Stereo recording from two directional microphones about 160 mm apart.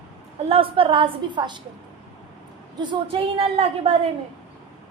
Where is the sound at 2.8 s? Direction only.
30° right (ahead or behind).